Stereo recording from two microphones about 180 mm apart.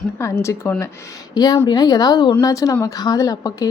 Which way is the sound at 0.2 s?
15° left (ahead or behind).